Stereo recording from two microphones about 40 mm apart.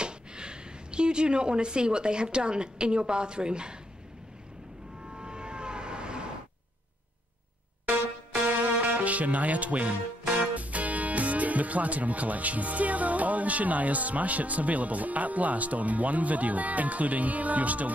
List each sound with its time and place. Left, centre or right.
0.0 s speech: right
5.1 s vehicle: right
8.5 s music: right
10.3 s speech: right